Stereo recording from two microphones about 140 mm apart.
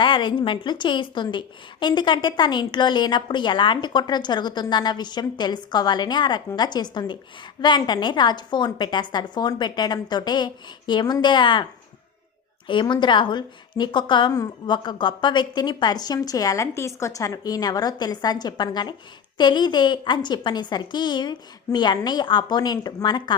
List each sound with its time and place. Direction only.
0.0 s a woman's voice: 35° left (ahead or behind)
12.6 s a woman's voice: 35° left (ahead or behind)